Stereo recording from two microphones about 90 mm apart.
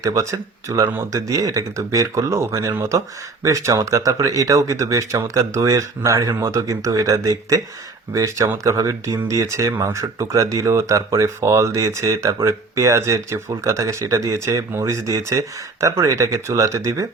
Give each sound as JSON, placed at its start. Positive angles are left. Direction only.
{"t": 0.0, "sound": "speech", "side_deg": -35}